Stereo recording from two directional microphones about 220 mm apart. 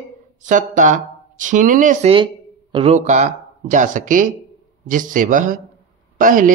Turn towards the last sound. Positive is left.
turn(degrees=-35)  # may be behind; listen again after turning